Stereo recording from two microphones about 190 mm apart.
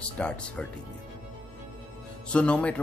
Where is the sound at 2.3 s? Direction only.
5° left (ahead or behind).